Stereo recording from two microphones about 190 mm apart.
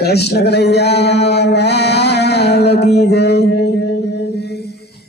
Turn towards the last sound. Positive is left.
turn(degrees=60)  # may be behind; listen again after turning